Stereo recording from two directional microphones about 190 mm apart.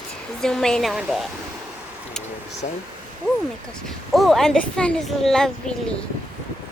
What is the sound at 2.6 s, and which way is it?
Speech, 40° left (ahead or behind).